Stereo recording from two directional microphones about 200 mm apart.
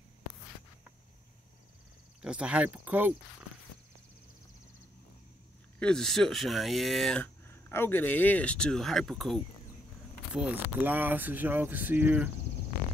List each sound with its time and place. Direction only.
2.2 s speech: 5° right (ahead or behind)
5.8 s speech: 5° left (ahead or behind)